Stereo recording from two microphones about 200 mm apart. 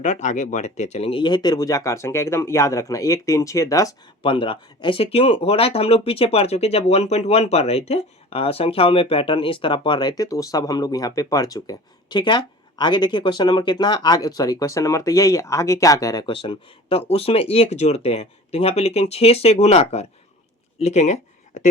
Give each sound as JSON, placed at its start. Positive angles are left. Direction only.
{"t": 0.0, "sound": "speech", "side_deg": 35}